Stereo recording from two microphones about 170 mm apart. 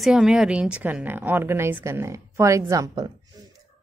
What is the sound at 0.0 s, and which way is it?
A woman's voice, 5° right (ahead or behind).